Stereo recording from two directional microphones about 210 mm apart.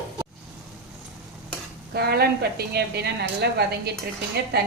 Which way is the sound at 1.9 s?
50° right (ahead or behind).